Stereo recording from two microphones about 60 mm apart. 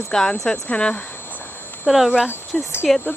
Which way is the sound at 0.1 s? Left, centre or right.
Centre.